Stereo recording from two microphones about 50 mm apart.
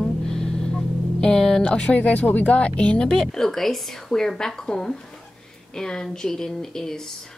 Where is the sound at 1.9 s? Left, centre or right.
Left.